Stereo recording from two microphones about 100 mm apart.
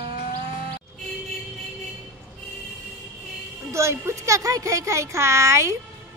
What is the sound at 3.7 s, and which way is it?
Speech, 30° right (ahead or behind).